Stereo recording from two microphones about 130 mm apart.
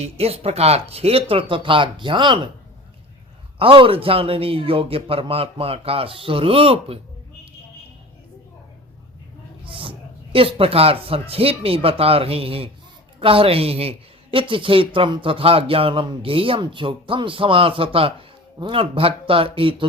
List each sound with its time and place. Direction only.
0.0 s speech: 50° right (ahead or behind)
3.6 s speech: 45° right (ahead or behind)
9.6 s a sound: 40° right (ahead or behind)
10.3 s speech: 45° right (ahead or behind)